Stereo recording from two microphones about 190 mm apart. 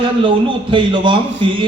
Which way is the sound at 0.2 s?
25° right (ahead or behind).